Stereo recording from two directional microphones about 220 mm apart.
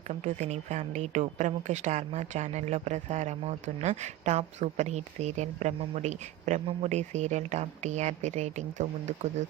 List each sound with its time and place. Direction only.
0.1 s a woman's voice: 30° right (ahead or behind)